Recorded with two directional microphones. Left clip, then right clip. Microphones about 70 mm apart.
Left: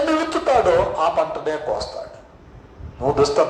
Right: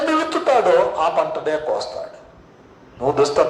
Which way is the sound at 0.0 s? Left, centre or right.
Right.